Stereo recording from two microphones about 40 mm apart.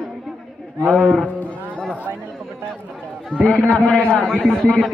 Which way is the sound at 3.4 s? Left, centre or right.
Left.